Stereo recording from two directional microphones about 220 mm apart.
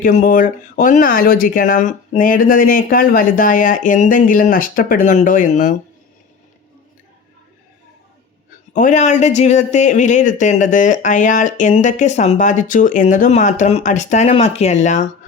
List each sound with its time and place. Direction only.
0.0 s speech: 35° left (ahead or behind)
8.7 s speech: 35° left (ahead or behind)